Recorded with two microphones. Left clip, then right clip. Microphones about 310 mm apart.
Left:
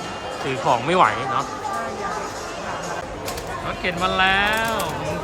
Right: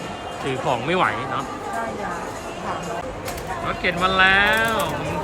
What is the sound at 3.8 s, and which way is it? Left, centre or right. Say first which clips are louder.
Speech: right 2 dB; centre.